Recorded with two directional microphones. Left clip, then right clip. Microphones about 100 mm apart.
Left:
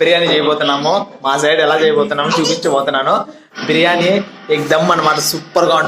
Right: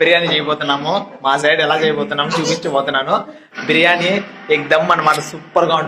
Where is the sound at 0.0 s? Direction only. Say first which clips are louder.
Left 2 dB; 30° left (ahead or behind).